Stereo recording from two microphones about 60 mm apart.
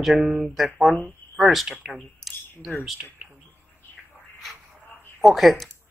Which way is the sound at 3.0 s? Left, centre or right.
Right.